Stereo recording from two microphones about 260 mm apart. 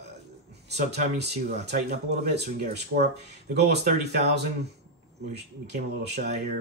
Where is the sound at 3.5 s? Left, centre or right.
Right.